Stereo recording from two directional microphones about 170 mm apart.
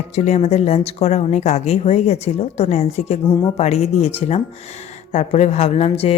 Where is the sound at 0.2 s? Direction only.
40° left (ahead or behind).